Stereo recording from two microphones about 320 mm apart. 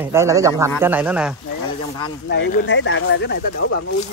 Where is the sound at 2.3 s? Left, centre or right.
Left.